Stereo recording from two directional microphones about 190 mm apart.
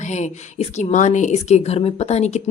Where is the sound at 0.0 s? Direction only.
40° left (ahead or behind).